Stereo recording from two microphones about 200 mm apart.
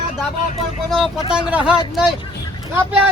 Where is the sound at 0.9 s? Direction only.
Centre (ahead or behind).